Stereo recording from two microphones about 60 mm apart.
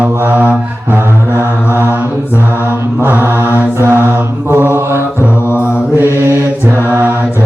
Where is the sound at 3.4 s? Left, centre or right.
Left.